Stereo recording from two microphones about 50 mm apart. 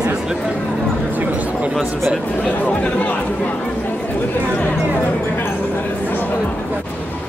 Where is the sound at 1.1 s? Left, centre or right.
Right.